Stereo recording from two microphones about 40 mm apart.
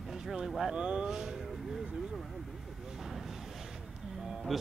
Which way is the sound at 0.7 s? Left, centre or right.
Right.